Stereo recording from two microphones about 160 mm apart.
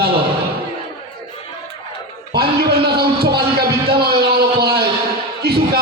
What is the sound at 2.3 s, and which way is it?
Music, 80° right.